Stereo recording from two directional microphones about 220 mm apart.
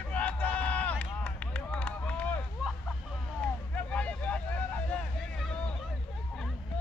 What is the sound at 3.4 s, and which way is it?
Vehicle, 5° left (ahead or behind).